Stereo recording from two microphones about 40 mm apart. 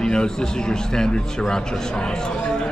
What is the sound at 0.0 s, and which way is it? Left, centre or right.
A man's voice, left.